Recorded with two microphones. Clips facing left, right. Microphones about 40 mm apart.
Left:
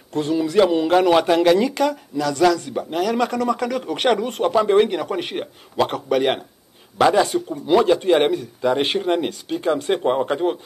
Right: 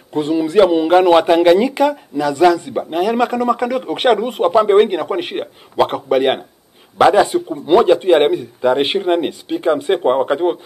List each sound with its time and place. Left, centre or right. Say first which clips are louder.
0.1 s speech: right 4 dB; centre